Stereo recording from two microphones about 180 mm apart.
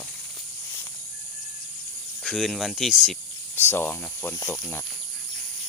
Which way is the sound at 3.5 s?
10° left (ahead or behind).